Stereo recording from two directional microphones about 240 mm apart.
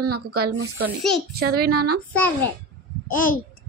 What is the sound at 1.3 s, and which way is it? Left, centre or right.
Speech, right.